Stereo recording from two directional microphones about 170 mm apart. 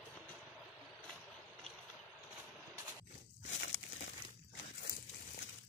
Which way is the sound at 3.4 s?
90° left.